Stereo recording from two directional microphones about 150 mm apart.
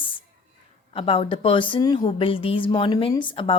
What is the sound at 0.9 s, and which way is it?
A woman's voice, 35° left (ahead or behind).